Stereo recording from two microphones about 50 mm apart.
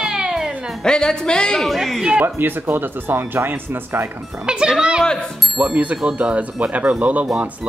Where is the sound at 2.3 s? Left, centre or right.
Right.